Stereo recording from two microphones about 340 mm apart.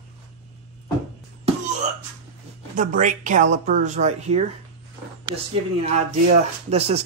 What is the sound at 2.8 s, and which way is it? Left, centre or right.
Speech, right.